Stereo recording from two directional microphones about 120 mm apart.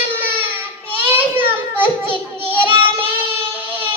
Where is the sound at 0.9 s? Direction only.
15° right (ahead or behind).